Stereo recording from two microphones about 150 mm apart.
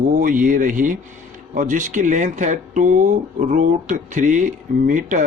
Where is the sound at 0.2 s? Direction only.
65° right (ahead or behind).